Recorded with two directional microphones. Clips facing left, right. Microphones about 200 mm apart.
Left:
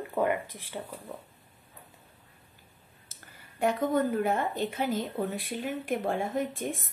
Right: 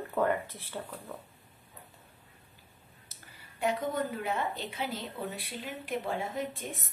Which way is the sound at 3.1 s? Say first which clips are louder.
Left 3 dB; 50° left (ahead or behind).